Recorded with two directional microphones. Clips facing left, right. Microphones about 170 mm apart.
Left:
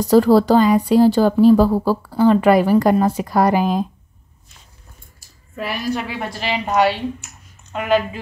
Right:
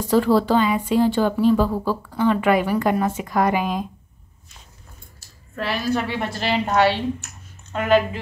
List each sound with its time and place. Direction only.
0.0 s speech: 40° left (ahead or behind)
5.6 s a woman's voice: 10° left (ahead or behind)